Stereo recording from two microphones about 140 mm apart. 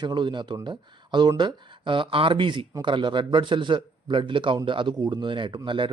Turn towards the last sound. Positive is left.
turn(degrees=-35)  # may be behind; listen again after turning